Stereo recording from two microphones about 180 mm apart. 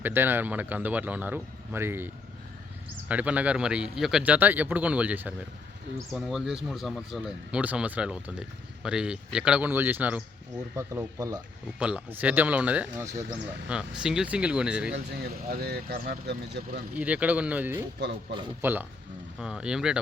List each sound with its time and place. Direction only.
0.0 s speech: 10° right (ahead or behind)
14.9 s speech: 55° right (ahead or behind)
16.9 s speech: 10° right (ahead or behind)